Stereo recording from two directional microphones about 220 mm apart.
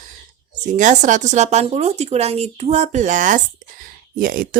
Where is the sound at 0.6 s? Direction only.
35° right (ahead or behind).